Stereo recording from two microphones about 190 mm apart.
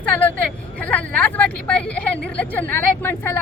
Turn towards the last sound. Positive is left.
turn(degrees=10)  # may be behind; listen again after turning